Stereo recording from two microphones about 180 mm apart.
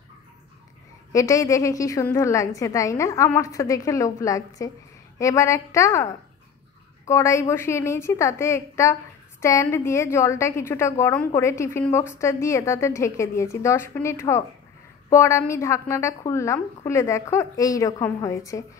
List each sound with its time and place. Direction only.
1.1 s a woman's voice: 20° left (ahead or behind)